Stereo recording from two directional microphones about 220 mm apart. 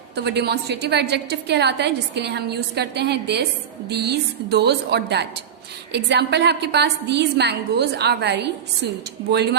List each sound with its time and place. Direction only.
0.2 s a woman's voice: 50° right (ahead or behind)